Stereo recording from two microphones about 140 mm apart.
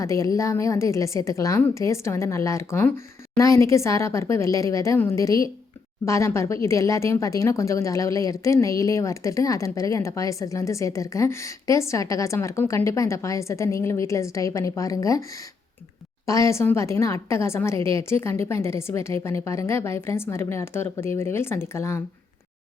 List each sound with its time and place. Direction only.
0.0 s a woman's voice: 25° left (ahead or behind)